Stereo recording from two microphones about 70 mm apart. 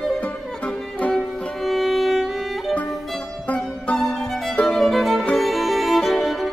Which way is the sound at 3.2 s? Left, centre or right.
Centre.